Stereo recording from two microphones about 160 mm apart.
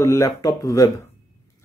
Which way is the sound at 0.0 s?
20° left (ahead or behind).